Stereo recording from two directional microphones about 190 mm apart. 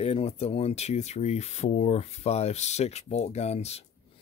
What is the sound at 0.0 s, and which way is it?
Speech, 30° left (ahead or behind).